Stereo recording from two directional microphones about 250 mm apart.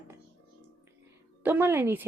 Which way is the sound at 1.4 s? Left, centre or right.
Centre.